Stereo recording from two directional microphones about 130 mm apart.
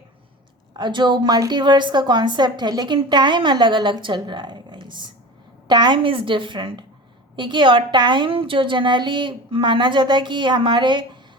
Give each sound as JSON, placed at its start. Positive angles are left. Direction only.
{"t": 0.8, "sound": "a woman's voice", "side_deg": -35}